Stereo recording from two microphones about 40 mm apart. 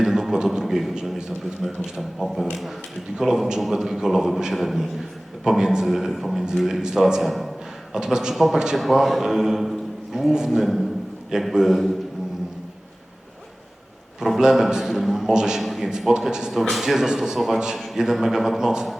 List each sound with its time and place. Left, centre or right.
0.0 s a sound: centre
0.6 s a man's voice: centre
7.9 s a man's voice: centre
8.7 s a man's voice: centre
14.3 s a man's voice: centre
15.6 s a man's voice: centre